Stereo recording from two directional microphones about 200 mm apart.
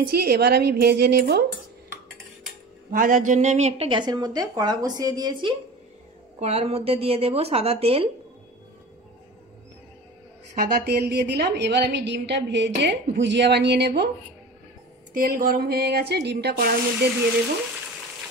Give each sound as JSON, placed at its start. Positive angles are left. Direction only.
{"t": 0.0, "sound": "speech", "side_deg": -50}
{"t": 2.9, "sound": "a woman's voice", "side_deg": -40}
{"t": 10.5, "sound": "a woman's voice", "side_deg": -45}
{"t": 15.1, "sound": "speech", "side_deg": -45}